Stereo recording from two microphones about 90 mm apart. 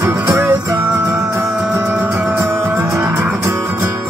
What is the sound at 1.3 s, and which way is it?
Music, 25° right (ahead or behind).